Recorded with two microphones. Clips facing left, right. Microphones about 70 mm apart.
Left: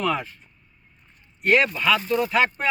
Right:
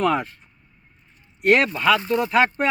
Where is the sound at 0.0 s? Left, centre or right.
Right.